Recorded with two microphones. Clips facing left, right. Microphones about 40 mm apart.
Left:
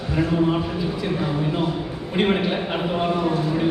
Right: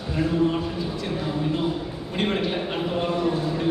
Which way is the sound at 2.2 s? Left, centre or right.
Centre.